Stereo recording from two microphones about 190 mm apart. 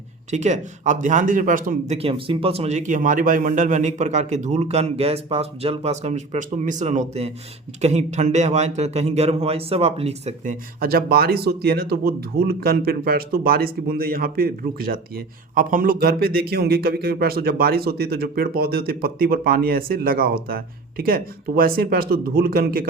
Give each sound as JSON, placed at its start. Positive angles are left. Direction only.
{"t": 0.3, "sound": "a man's voice", "side_deg": -35}